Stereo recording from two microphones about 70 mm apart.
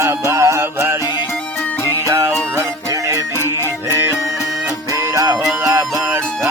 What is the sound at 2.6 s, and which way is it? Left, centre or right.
Music, right.